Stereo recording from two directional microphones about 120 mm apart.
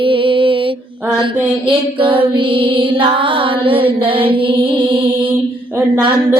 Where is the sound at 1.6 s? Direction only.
45° right (ahead or behind).